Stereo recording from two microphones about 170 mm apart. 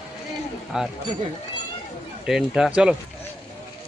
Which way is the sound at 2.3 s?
Centre (ahead or behind).